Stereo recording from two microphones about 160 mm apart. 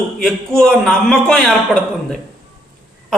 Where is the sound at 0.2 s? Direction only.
5° left (ahead or behind).